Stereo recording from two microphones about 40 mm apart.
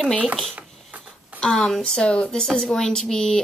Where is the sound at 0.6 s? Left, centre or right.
Right.